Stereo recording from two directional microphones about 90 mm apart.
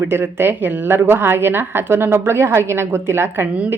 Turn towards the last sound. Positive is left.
turn(degrees=-25)  # may be behind; listen again after turning